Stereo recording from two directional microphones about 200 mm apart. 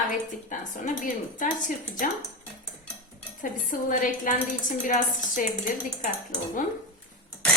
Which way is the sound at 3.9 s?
40° left (ahead or behind).